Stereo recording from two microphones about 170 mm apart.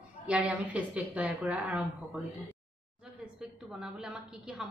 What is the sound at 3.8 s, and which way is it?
Speech, 5° right (ahead or behind).